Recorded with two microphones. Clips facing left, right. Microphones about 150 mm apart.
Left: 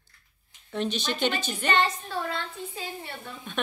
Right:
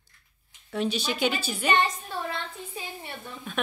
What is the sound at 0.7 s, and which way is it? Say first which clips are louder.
A woman's voice: right 1 dB; 5° right (ahead or behind).